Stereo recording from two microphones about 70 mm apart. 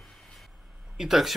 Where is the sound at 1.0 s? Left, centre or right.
Centre.